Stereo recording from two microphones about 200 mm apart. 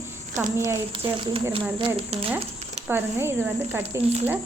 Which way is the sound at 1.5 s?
25° right (ahead or behind).